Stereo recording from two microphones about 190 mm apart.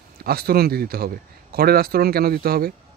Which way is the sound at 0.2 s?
55° right (ahead or behind).